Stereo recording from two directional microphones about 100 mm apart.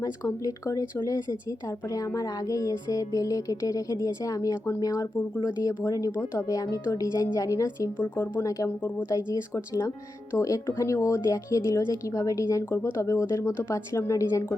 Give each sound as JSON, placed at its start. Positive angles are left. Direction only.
{"t": 0.0, "sound": "speech", "side_deg": 35}
{"t": 5.8, "sound": "speech", "side_deg": 35}
{"t": 7.9, "sound": "speech", "side_deg": 20}
{"t": 8.4, "sound": "speech", "side_deg": 30}